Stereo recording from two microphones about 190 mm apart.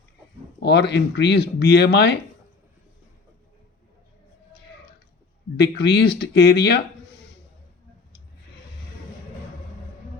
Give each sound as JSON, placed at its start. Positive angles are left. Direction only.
{"t": 0.6, "sound": "speech", "side_deg": 60}
{"t": 5.5, "sound": "speech", "side_deg": 60}